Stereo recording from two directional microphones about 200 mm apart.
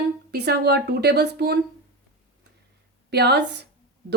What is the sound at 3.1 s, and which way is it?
Speech, 55° right (ahead or behind).